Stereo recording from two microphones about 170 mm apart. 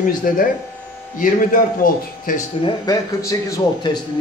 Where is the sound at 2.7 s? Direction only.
20° left (ahead or behind).